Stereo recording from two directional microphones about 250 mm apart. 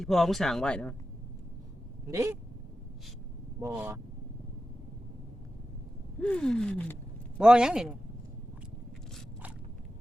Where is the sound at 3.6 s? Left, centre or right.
Centre.